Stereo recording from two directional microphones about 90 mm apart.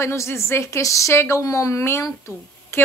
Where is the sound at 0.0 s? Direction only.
30° left (ahead or behind).